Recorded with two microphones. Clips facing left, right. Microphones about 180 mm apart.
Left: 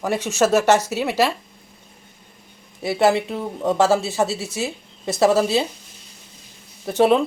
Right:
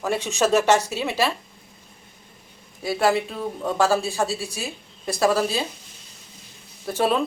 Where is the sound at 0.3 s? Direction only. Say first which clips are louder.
Left 2 dB; 10° left (ahead or behind).